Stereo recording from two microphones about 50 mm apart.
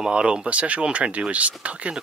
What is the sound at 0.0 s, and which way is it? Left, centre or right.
Speech, centre.